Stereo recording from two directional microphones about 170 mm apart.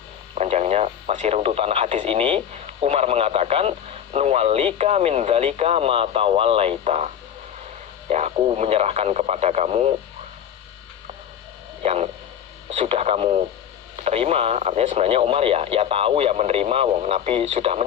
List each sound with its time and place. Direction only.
0.3 s radio: 40° right (ahead or behind)
2.8 s speech: 35° right (ahead or behind)
8.1 s speech: 40° right (ahead or behind)
11.8 s a sound: 40° right (ahead or behind)
12.8 s radio: 35° right (ahead or behind)
14.0 s speech: 35° right (ahead or behind)